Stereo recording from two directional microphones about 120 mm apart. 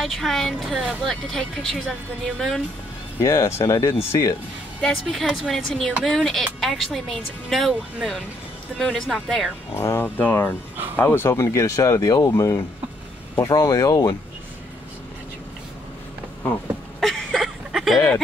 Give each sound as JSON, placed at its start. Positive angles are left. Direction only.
{"t": 0.0, "sound": "a woman's voice", "side_deg": 0}
{"t": 3.2, "sound": "speech", "side_deg": 25}
{"t": 5.0, "sound": "a woman's voice", "side_deg": 0}
{"t": 9.8, "sound": "speech", "side_deg": 20}
{"t": 17.0, "sound": "a sound", "side_deg": 0}